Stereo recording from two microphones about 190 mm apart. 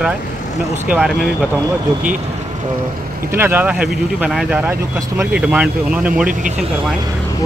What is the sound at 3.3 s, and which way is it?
Speech, 10° right (ahead or behind).